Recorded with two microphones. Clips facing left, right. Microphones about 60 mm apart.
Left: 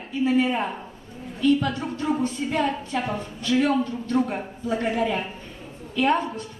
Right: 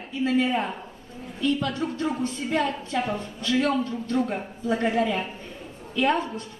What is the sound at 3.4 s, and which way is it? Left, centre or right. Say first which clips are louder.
Speech: left 2 dB; left.